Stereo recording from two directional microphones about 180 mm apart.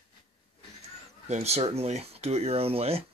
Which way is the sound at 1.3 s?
35° right (ahead or behind).